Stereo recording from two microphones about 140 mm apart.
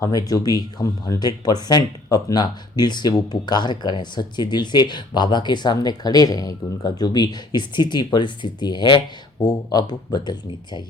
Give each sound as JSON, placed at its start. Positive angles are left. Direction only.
{"t": 0.0, "sound": "speech", "side_deg": 25}